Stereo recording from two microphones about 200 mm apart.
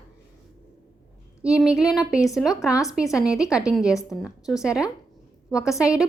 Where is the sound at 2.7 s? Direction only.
15° left (ahead or behind).